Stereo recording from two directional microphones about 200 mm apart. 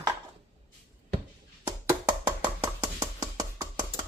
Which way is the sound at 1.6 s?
10° right (ahead or behind).